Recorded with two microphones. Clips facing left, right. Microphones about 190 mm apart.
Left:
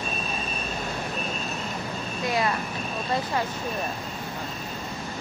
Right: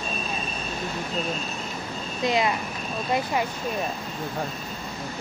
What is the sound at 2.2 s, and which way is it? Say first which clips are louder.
Speech: right 3 dB; 20° right (ahead or behind).